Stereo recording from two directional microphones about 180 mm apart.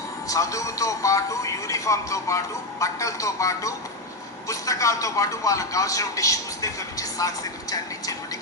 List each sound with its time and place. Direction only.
0.3 s speech: 20° left (ahead or behind)